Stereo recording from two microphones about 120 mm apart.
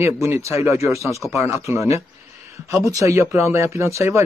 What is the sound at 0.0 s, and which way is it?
Speech, 20° right (ahead or behind).